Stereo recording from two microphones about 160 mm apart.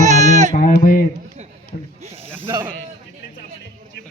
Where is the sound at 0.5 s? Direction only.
60° left (ahead or behind).